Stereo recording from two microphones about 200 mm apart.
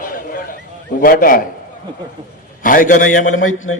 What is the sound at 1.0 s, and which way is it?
Speech, 45° left (ahead or behind).